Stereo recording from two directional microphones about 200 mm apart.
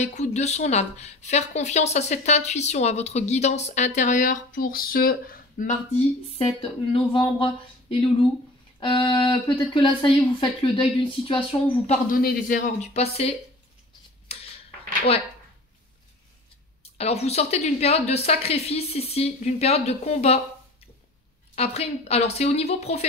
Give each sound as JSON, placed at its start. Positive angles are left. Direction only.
{"t": 0.0, "sound": "speech", "side_deg": 35}
{"t": 6.9, "sound": "speech", "side_deg": 25}
{"t": 12.1, "sound": "speech", "side_deg": 45}
{"t": 14.3, "sound": "a sound", "side_deg": 30}
{"t": 16.8, "sound": "speech", "side_deg": 30}
{"t": 21.5, "sound": "speech", "side_deg": 30}